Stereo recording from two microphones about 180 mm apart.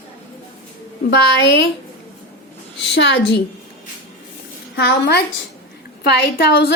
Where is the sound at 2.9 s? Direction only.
85° left.